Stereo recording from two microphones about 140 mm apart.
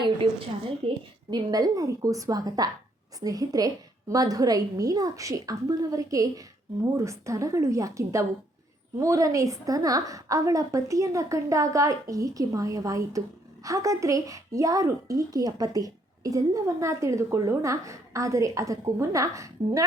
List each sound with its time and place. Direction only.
0.0 s a woman's voice: 40° right (ahead or behind)
1.3 s speech: 25° right (ahead or behind)